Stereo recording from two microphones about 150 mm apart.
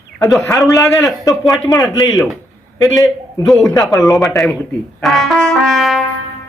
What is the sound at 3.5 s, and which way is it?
A man's voice, centre (ahead or behind).